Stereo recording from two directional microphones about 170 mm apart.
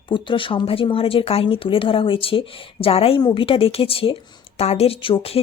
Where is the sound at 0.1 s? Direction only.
30° left (ahead or behind).